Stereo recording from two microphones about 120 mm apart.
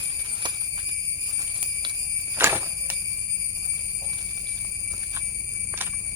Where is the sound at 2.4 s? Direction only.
20° right (ahead or behind).